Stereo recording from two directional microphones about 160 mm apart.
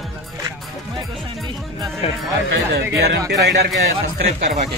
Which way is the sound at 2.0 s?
35° left (ahead or behind).